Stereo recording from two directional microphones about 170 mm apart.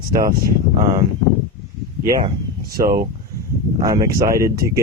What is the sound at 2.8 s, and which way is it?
Speech, 60° right (ahead or behind).